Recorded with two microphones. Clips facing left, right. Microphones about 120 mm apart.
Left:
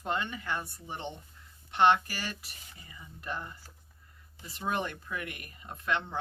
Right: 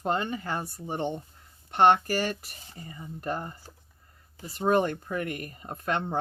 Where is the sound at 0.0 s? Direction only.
35° right (ahead or behind).